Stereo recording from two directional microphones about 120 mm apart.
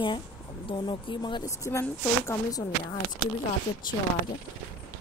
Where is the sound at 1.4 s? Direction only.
25° left (ahead or behind).